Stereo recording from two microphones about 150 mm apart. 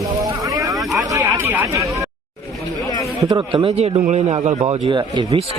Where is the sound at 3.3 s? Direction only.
30° right (ahead or behind).